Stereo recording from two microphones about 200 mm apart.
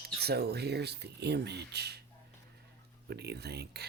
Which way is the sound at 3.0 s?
55° right (ahead or behind).